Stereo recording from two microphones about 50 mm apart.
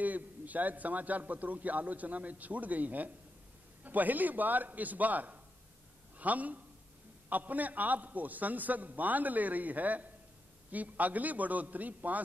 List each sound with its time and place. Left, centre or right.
0.0 s a man's voice: right